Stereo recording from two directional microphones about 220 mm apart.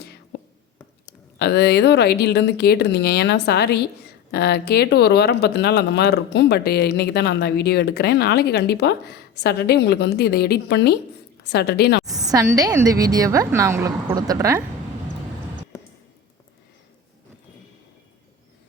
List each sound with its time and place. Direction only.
0.0 s whispering: 50° left (ahead or behind)
1.4 s speech: 50° left (ahead or behind)
12.2 s a woman's voice: 15° right (ahead or behind)